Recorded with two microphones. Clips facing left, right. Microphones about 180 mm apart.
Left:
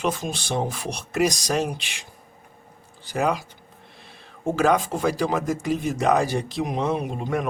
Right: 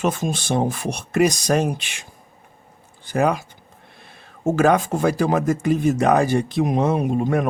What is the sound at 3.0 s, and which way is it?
Speech, 55° right (ahead or behind).